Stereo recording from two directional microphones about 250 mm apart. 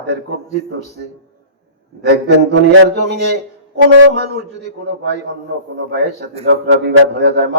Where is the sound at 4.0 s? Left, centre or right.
Right.